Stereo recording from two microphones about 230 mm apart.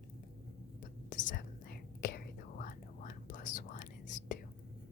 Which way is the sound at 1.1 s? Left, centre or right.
Left.